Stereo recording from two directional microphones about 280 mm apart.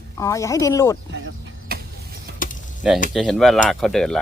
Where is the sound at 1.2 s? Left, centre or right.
Right.